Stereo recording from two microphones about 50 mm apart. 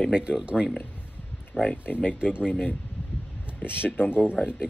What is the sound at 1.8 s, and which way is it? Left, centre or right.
Speech, left.